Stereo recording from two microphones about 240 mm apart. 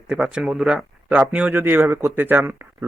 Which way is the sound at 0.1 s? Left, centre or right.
Centre.